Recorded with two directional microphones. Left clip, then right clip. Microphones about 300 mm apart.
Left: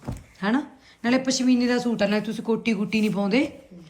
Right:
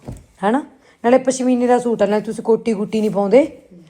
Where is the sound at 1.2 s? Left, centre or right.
Centre.